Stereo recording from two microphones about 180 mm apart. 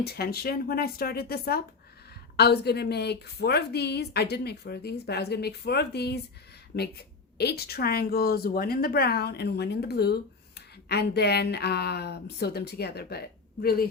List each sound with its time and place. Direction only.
0.0 s a woman's voice: 60° left (ahead or behind)